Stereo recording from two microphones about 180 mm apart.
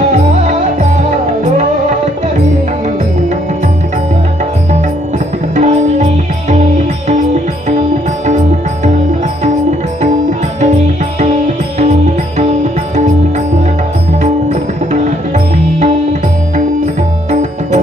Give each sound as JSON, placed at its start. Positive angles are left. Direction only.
{"t": 5.6, "sound": "music", "side_deg": -40}
{"t": 11.8, "sound": "music", "side_deg": -40}
{"t": 14.2, "sound": "music", "side_deg": -40}